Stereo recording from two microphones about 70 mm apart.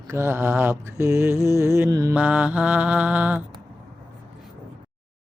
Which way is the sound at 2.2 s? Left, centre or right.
Centre.